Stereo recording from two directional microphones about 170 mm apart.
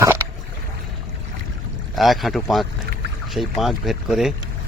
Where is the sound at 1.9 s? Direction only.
Centre (ahead or behind).